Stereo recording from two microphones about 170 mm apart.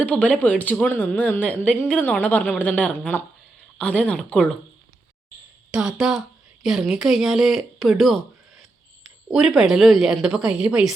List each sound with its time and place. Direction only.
0.0 s speech: 10° left (ahead or behind)
5.7 s a woman's voice: 5° right (ahead or behind)
9.3 s a woman's voice: 5° right (ahead or behind)